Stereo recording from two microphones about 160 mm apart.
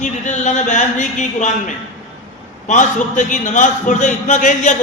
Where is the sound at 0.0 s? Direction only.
50° left (ahead or behind).